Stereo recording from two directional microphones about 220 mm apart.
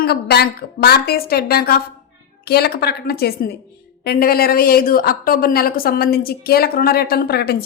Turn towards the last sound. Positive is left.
turn(degrees=45)  # may be behind; listen again after turning